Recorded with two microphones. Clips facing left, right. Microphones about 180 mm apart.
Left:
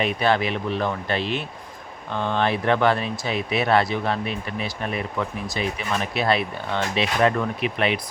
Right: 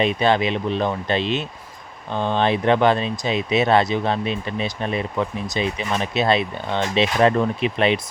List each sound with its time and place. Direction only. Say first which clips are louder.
0.0 s speech: right 3 dB; 20° right (ahead or behind)